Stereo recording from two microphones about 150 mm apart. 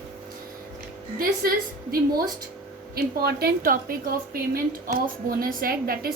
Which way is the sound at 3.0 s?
90° right.